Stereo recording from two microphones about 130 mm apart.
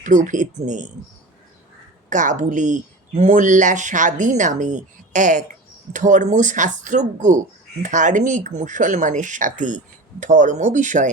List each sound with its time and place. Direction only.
0.0 s speech: 75° right (ahead or behind)
2.0 s speech: 75° right (ahead or behind)